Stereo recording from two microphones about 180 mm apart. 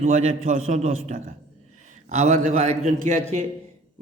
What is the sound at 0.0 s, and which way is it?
A man's voice, 40° right (ahead or behind).